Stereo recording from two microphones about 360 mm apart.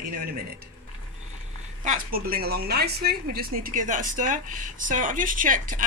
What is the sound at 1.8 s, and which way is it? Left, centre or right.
Speech, right.